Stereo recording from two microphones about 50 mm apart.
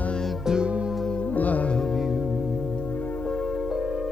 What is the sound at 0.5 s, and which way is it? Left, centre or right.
Music, centre.